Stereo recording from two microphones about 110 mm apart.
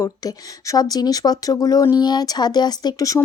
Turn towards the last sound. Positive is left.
turn(degrees=30)  # may be behind; listen again after turning